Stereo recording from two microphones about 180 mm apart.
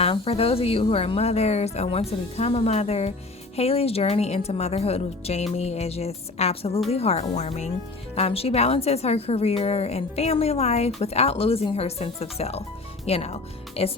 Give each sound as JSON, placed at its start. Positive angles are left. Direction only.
{"t": 0.0, "sound": "speech", "side_deg": 35}